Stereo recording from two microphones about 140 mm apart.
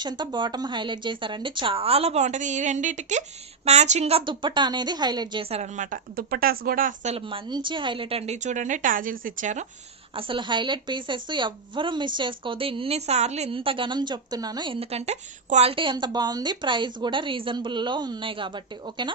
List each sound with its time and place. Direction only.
0.0 s a woman's voice: 30° right (ahead or behind); by 4.2 s 50° right (ahead or behind)
4.3 s a woman's voice: 35° right (ahead or behind)
5.5 s speech: 55° right (ahead or behind); by 6.9 s 90° right
7.0 s a woman's voice: 45° right (ahead or behind)
8.3 s speech: 60° right (ahead or behind)
10.2 s a woman's voice: 35° right (ahead or behind)